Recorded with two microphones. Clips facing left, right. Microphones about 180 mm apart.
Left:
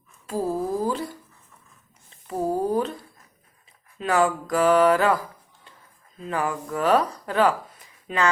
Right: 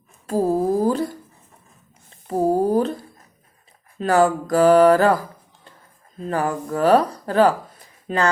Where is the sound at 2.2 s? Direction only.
35° right (ahead or behind).